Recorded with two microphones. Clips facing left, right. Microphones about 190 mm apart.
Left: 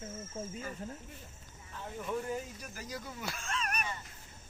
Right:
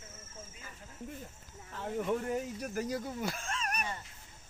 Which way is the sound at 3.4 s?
40° right (ahead or behind).